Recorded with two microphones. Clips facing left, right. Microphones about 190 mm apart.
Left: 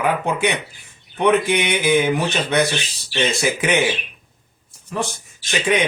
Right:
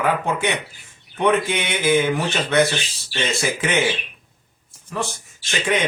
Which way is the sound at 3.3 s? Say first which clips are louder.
Left 1 dB; 15° left (ahead or behind).